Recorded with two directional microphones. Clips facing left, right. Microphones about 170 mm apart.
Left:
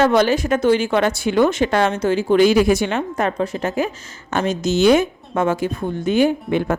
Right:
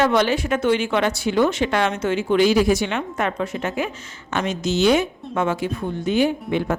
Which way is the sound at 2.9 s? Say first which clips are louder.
Left 3 dB; 35° left (ahead or behind).